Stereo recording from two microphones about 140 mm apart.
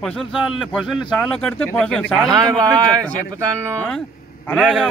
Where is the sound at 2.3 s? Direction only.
25° right (ahead or behind).